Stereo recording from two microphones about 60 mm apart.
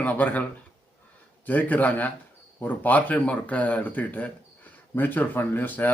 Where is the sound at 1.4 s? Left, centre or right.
Left.